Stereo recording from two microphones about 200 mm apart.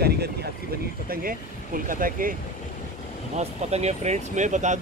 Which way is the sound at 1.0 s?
45° right (ahead or behind).